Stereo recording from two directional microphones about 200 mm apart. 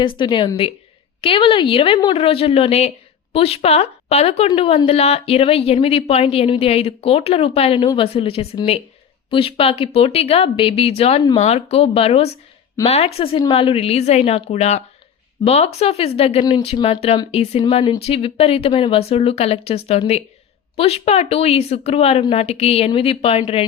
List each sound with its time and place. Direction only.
0.0 s a woman's voice: 25° left (ahead or behind)